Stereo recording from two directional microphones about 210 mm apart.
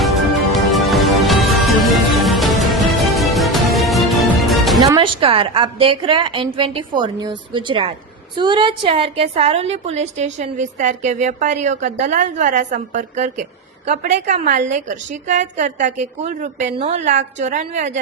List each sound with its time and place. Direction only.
0.5 s music: centre (ahead or behind)
4.8 s a woman's voice: 20° right (ahead or behind)